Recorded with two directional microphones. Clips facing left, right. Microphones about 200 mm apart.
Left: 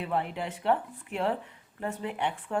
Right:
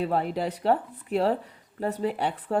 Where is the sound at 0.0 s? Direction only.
35° right (ahead or behind).